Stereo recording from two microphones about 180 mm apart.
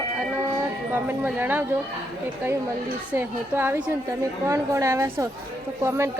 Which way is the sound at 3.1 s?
10° right (ahead or behind).